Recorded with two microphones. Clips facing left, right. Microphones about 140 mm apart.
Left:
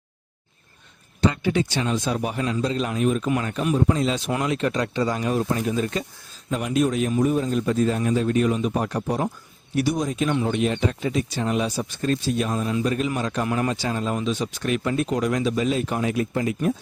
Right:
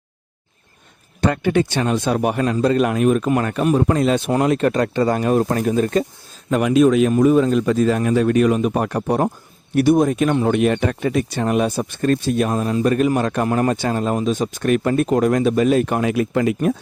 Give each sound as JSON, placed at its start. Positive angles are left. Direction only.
{"t": 1.2, "sound": "speech", "side_deg": -55}
{"t": 4.3, "sound": "speech", "side_deg": -45}
{"t": 6.5, "sound": "speech", "side_deg": -85}